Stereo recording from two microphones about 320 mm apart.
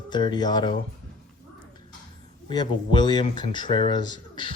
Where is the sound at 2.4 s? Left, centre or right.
Centre.